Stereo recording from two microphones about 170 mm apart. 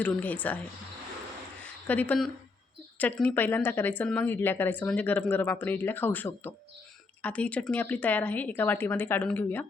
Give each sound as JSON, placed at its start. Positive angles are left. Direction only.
{"t": 0.0, "sound": "speech", "side_deg": 10}
{"t": 1.9, "sound": "speech", "side_deg": 10}